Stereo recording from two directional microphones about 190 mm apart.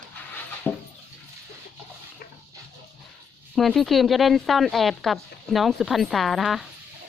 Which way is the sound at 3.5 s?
Centre (ahead or behind).